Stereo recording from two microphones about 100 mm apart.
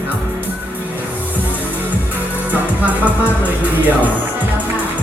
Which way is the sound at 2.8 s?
15° right (ahead or behind).